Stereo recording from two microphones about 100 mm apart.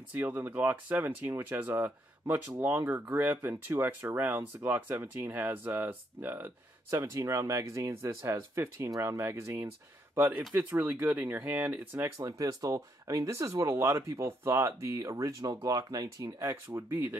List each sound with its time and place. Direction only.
0.1 s speech: 20° right (ahead or behind)
12.2 s speech: 35° right (ahead or behind)
16.9 s speech: 20° right (ahead or behind)